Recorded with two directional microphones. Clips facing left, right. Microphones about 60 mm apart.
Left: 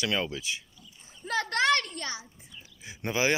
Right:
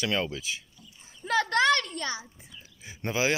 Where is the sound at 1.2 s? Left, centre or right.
Right.